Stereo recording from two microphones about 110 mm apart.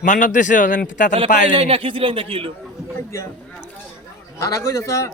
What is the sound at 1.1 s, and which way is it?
A man's voice, 60° right (ahead or behind).